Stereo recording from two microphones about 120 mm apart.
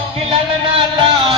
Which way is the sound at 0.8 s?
45° right (ahead or behind).